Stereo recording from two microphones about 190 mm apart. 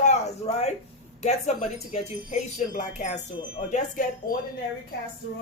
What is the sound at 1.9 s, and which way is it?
A woman's voice, 40° left (ahead or behind).